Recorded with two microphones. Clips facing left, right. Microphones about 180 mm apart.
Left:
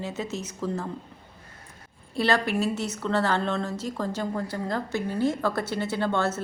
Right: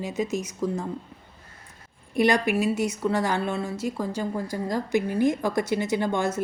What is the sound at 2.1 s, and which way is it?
Speech, 15° right (ahead or behind).